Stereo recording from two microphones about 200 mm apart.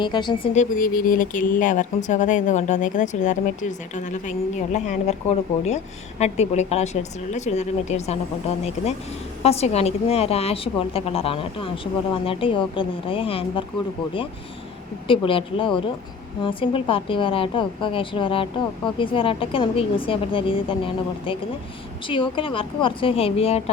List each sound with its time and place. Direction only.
0.0 s speech: 20° left (ahead or behind)
0.5 s speech: 40° left (ahead or behind)
15.0 s speech: 25° left (ahead or behind)